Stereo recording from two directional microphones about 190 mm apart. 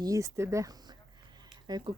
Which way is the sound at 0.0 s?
15° right (ahead or behind).